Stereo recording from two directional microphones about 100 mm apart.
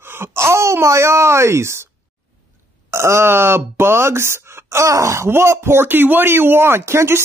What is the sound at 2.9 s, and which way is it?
Speech, 25° right (ahead or behind).